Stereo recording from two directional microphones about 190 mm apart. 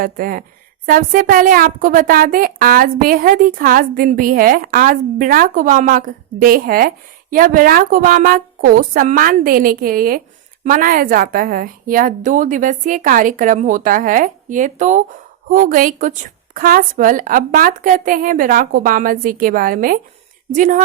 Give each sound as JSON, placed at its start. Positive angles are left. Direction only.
{"t": 0.0, "sound": "a woman's voice", "side_deg": -50}